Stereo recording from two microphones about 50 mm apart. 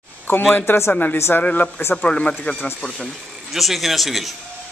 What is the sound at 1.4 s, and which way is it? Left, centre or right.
Speech, left.